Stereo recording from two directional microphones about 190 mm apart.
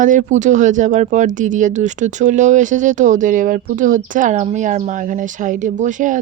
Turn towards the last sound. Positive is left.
turn(degrees=-40)  # may be behind; listen again after turning